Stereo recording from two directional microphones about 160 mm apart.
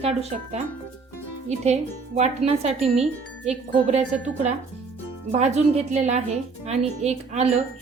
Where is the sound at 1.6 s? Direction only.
45° right (ahead or behind).